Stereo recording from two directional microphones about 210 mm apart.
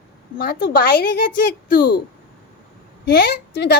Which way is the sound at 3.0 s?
45° left (ahead or behind).